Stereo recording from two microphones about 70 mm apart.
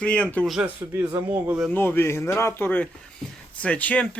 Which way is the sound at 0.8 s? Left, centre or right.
Right.